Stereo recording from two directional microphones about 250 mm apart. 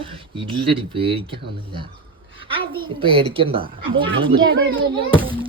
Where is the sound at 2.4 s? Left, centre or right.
Right.